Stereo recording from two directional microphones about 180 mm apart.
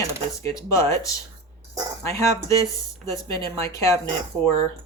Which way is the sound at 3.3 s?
30° right (ahead or behind).